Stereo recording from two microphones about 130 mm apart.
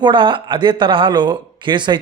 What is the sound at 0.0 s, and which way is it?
A man's voice, 40° right (ahead or behind).